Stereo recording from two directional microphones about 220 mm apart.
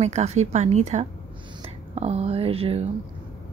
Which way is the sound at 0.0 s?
30° right (ahead or behind).